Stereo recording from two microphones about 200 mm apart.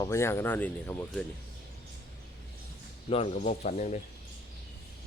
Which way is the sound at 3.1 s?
30° left (ahead or behind).